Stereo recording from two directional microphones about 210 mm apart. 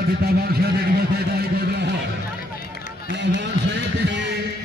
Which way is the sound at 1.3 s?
50° right (ahead or behind).